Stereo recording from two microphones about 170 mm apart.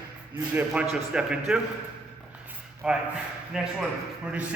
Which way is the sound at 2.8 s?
5° right (ahead or behind).